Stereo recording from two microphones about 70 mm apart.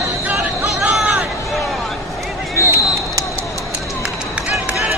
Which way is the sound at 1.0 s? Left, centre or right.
Centre.